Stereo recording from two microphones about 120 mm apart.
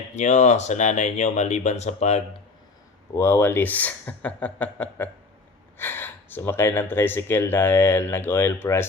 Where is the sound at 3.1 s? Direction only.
20° left (ahead or behind).